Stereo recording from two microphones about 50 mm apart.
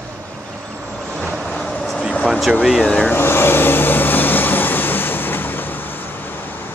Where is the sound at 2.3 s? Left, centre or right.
Centre.